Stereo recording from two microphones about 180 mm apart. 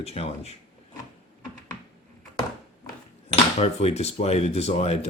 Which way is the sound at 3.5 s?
35° left (ahead or behind).